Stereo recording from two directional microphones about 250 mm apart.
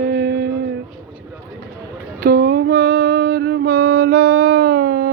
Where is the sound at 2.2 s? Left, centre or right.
Right.